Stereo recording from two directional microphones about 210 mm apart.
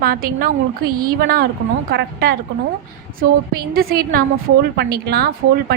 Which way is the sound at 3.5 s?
45° right (ahead or behind).